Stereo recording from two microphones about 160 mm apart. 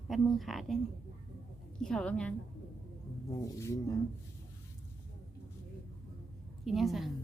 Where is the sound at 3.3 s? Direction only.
20° left (ahead or behind).